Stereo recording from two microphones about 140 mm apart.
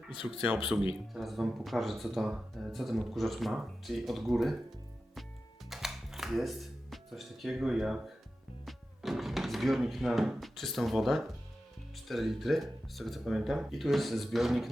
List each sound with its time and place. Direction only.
0.1 s speech: 40° left (ahead or behind)
0.7 s speech: 5° right (ahead or behind)
5.7 s music: centre (ahead or behind)
8.6 s speech: centre (ahead or behind)